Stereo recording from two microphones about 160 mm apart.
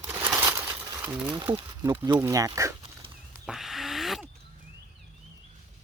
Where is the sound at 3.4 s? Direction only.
Centre (ahead or behind).